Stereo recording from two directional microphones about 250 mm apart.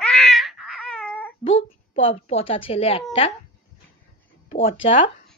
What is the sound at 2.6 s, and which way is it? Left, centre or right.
Speech, left.